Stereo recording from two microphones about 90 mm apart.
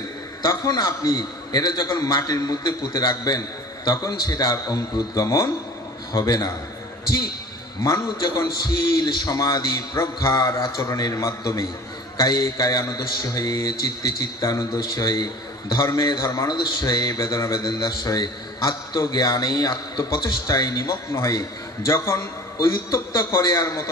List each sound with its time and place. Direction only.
0.4 s a man's voice: 45° left (ahead or behind)
7.8 s a man's voice: 45° left (ahead or behind)